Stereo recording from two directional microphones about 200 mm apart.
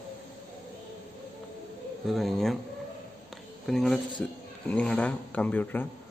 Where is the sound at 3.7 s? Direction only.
5° left (ahead or behind).